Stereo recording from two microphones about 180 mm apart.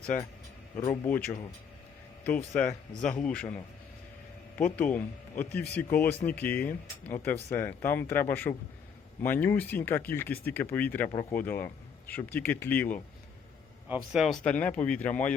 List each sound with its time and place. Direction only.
1.0 s speech: 10° left (ahead or behind)
1.3 s speech: 25° left (ahead or behind)
2.2 s speech: 10° left (ahead or behind)
4.5 s speech: 10° left (ahead or behind)
13.8 s speech: 5° right (ahead or behind)